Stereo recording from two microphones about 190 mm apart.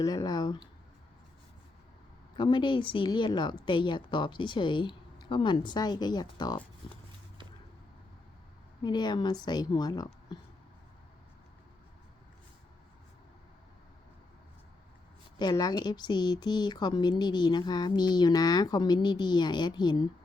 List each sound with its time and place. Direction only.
0.0 s speech: 20° left (ahead or behind)
2.3 s speech: 25° left (ahead or behind)
8.8 s speech: 20° left (ahead or behind)
15.4 s speech: 20° left (ahead or behind)